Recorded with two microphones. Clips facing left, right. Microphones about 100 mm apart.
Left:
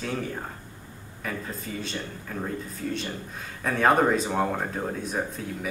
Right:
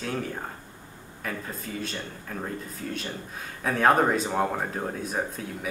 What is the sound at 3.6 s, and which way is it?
Speech, centre (ahead or behind).